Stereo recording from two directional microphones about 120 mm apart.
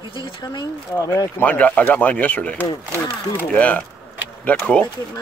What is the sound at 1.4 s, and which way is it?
Speech, 10° left (ahead or behind).